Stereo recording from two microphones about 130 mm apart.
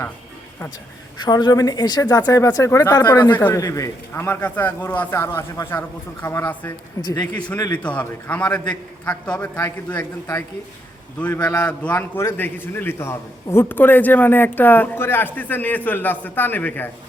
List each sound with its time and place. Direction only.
1.2 s a man's voice: 35° left (ahead or behind)
6.5 s a man's voice: 15° left (ahead or behind)
7.0 s speech: 30° left (ahead or behind)
7.8 s a man's voice: 10° left (ahead or behind)
11.5 s a man's voice: 10° left (ahead or behind)